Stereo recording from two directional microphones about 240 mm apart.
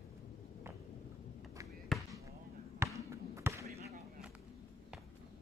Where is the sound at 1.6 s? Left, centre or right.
Centre.